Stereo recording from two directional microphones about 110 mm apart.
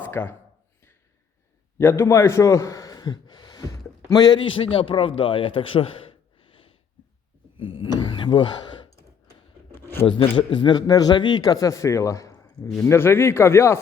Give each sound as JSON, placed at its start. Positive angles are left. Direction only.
{"t": 0.0, "sound": "speech", "side_deg": 20}
{"t": 1.8, "sound": "a man's voice", "side_deg": 25}
{"t": 7.6, "sound": "a sound", "side_deg": 55}
{"t": 10.1, "sound": "a man's voice", "side_deg": 50}